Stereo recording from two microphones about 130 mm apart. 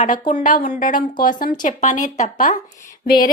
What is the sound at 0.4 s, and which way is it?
A woman's voice, 90° left.